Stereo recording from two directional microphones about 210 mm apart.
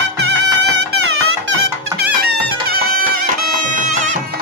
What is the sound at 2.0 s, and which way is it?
Music, 45° right (ahead or behind).